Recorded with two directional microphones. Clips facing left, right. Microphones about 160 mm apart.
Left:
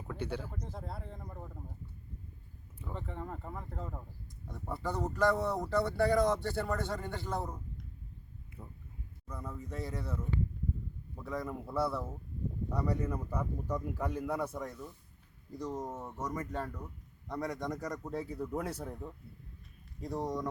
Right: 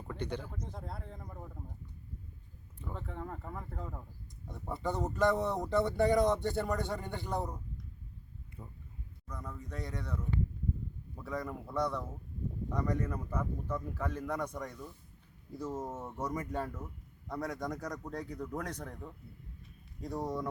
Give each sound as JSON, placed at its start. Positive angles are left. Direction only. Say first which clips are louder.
{"t": 0.1, "sound": "speech", "louder": "even", "side_deg": 5}
{"t": 2.7, "sound": "speech", "louder": "left 1 dB", "side_deg": 0}
{"t": 4.7, "sound": "speech", "louder": "right 1 dB", "side_deg": -20}
{"t": 9.2, "sound": "speech", "louder": "left 2 dB", "side_deg": 5}
{"t": 11.2, "sound": "speech", "louder": "left 1 dB", "side_deg": 0}